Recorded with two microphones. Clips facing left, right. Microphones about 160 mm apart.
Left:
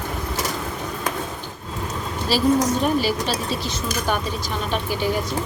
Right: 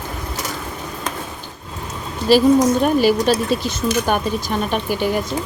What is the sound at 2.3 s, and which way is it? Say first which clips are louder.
Speech: right 6 dB; 55° right (ahead or behind).